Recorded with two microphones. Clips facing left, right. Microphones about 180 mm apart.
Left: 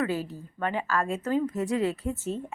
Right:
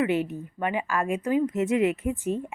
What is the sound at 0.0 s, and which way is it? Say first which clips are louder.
A woman's voice: right 4 dB; 20° right (ahead or behind).